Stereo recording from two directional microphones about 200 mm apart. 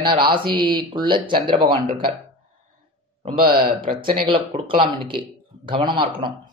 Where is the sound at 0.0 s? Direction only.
25° right (ahead or behind).